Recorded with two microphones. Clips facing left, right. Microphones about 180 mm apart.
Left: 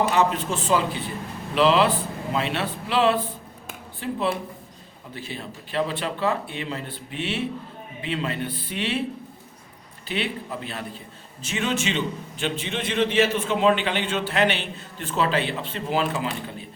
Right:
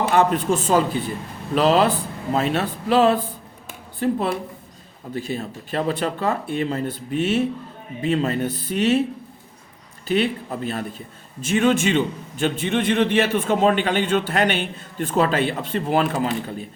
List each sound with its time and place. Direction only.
0.1 s a man's voice: 50° right (ahead or behind)
10.1 s a man's voice: 45° right (ahead or behind)